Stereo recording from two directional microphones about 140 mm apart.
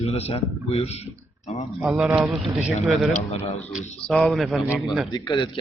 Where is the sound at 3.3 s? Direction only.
45° left (ahead or behind).